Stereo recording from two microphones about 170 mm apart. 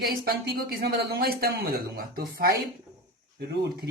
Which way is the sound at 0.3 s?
65° right (ahead or behind).